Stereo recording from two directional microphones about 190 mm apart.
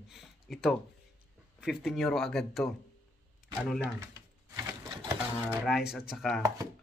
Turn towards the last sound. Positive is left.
turn(degrees=0)  # may be behind; listen again after turning